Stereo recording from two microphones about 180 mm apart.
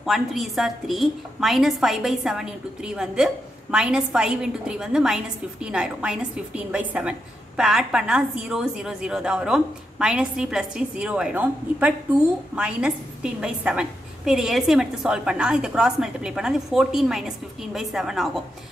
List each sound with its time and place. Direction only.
0.0 s a woman's voice: centre (ahead or behind)